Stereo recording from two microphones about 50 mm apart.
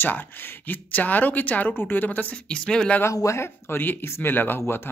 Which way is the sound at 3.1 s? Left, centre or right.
Left.